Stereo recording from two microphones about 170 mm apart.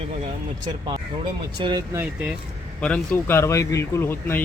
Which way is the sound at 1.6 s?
25° right (ahead or behind).